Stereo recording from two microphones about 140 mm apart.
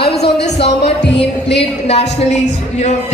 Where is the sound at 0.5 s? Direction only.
45° left (ahead or behind).